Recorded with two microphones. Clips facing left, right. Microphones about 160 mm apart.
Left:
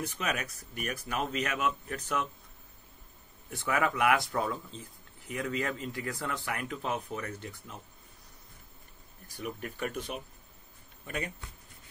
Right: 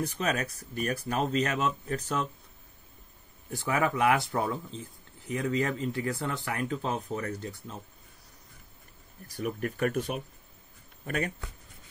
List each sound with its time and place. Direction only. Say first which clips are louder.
0.0 s speech: right 4 dB; 35° right (ahead or behind)
3.4 s speech: right 2 dB; 30° right (ahead or behind)
9.4 s speech: right 6 dB; 45° right (ahead or behind)